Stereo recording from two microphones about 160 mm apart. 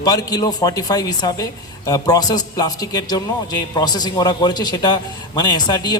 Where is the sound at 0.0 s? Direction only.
25° left (ahead or behind).